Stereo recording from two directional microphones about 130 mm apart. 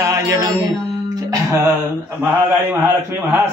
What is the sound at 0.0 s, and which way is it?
Music, 25° right (ahead or behind).